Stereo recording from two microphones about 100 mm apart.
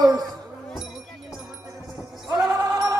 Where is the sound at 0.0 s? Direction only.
40° right (ahead or behind).